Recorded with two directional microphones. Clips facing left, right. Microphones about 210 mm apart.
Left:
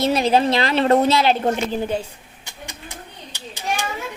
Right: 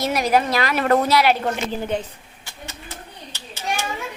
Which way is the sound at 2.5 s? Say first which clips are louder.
Even; 15° left (ahead or behind).